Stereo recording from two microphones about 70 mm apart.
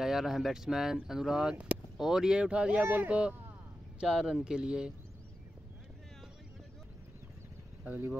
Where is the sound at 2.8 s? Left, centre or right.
Right.